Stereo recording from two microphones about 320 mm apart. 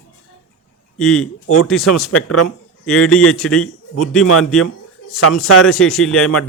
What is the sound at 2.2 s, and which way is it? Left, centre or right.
Speech, left.